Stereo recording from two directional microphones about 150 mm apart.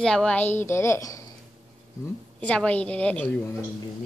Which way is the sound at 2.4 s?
10° left (ahead or behind).